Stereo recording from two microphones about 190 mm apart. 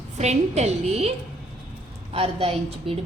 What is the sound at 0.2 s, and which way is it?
Speech, 35° right (ahead or behind).